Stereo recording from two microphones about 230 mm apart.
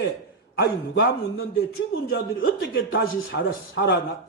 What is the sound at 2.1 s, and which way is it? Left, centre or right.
A man's voice, left.